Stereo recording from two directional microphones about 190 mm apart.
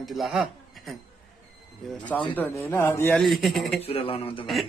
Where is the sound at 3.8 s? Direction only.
30° left (ahead or behind).